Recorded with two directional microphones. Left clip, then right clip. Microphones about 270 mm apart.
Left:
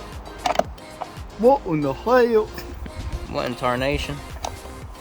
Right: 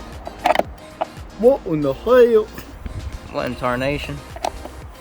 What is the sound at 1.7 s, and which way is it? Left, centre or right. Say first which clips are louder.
Speech: right 4 dB; centre.